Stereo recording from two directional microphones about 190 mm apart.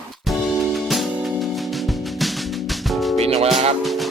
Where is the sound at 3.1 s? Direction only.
30° right (ahead or behind).